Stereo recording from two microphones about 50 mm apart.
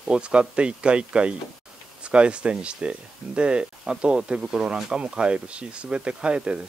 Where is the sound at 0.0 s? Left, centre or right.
Centre.